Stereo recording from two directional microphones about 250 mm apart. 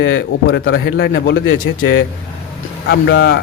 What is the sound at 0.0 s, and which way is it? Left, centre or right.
Speech, left.